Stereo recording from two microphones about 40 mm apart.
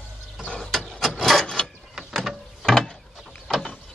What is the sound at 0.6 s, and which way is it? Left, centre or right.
Wood, centre.